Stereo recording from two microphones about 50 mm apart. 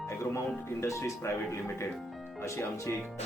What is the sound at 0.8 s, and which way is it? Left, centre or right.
Speech, left.